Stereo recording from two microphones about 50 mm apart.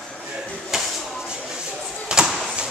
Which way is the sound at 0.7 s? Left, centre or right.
Centre.